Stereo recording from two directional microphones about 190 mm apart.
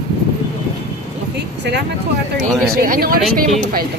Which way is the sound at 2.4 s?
50° right (ahead or behind).